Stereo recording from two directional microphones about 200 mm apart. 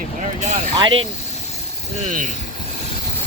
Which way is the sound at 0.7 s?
25° right (ahead or behind).